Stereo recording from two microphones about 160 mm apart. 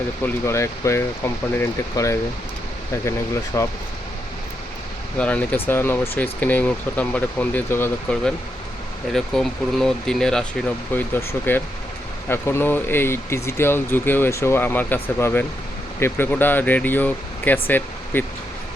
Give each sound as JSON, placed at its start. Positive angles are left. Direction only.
{"t": 0.4, "sound": "speech", "side_deg": 20}
{"t": 5.1, "sound": "speech", "side_deg": 10}